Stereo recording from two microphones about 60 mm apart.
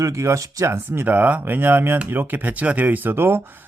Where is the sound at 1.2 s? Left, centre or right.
Right.